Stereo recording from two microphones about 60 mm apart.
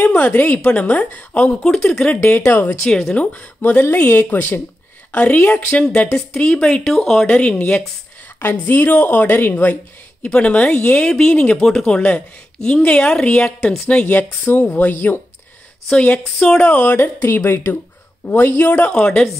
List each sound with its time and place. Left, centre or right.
0.0 s speech: left
1.6 s speech: centre
2.1 s speech: left
2.9 s speech: centre
3.2 s speech: left; by 7.2 s centre
7.2 s speech: left
16.0 s speech: centre
16.9 s speech: left
18.9 s speech: centre